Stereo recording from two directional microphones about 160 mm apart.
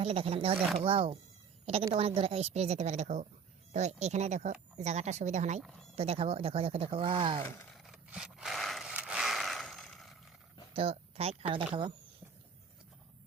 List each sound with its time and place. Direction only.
0.0 s a woman's voice: 35° right (ahead or behind)
7.7 s a sound: centre (ahead or behind)
10.8 s speech: 40° right (ahead or behind)